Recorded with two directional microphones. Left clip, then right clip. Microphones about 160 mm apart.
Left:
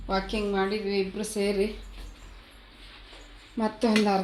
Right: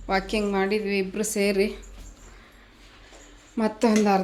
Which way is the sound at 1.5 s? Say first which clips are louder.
Right 3 dB; 25° right (ahead or behind).